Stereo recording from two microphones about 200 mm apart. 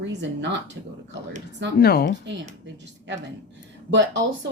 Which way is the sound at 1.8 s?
50° left (ahead or behind).